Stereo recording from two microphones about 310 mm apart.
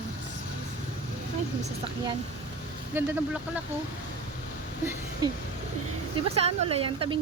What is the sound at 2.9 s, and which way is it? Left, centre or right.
Speech, centre.